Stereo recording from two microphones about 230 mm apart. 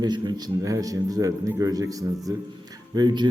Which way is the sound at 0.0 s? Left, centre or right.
Centre.